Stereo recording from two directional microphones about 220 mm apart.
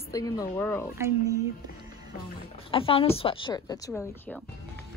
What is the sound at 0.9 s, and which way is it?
Speech, 10° right (ahead or behind).